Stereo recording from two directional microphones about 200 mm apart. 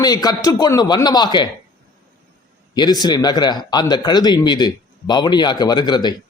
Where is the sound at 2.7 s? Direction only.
20° left (ahead or behind).